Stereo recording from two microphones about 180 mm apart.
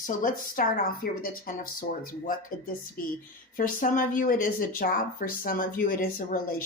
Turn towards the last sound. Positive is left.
turn(degrees=50)  # may be behind; listen again after turning